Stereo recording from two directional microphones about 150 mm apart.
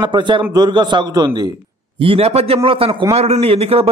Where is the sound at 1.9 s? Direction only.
40° right (ahead or behind).